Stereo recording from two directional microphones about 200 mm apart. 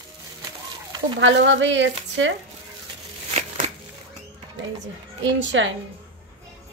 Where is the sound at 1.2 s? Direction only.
65° right (ahead or behind).